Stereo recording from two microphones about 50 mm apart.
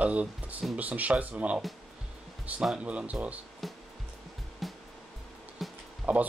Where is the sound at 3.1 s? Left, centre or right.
Right.